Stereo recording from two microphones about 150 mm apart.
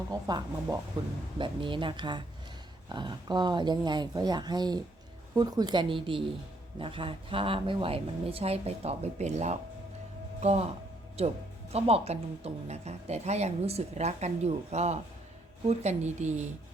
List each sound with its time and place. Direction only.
0.1 s speech: 25° right (ahead or behind); by 16.5 s 50° right (ahead or behind)